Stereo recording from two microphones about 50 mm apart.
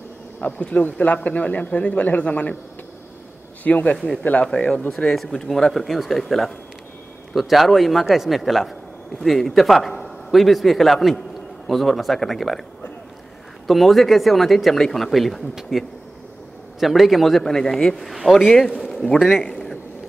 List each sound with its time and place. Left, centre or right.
0.6 s speech: left
3.6 s a man's voice: left
4.5 s a man's voice: centre
13.7 s speech: centre
15.7 s speech: centre
18.8 s a sound: centre
19.3 s a sound: centre